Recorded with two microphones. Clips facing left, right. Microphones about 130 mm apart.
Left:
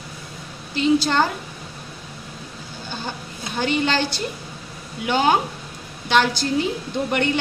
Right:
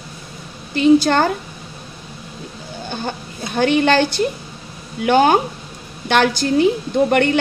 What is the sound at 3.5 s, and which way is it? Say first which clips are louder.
A woman's voice: right 7 dB; 60° right (ahead or behind).